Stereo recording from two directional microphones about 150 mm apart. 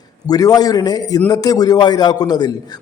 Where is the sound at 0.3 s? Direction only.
25° left (ahead or behind).